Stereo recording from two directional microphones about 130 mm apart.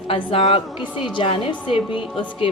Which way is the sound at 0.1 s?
40° left (ahead or behind).